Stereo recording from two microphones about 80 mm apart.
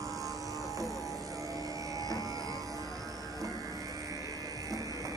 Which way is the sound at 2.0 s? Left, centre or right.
Right.